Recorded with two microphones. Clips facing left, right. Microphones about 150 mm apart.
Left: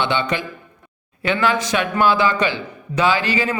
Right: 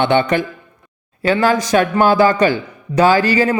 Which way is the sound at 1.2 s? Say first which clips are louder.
Right 5 dB; 40° right (ahead or behind).